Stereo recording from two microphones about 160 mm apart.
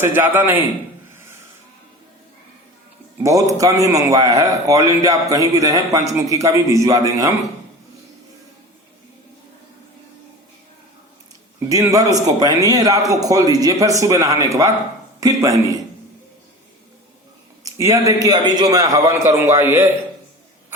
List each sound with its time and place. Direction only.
0.0 s a man's voice: 15° right (ahead or behind)
3.6 s a man's voice: 20° right (ahead or behind)
11.7 s a man's voice: 20° right (ahead or behind)
17.6 s a man's voice: 20° right (ahead or behind)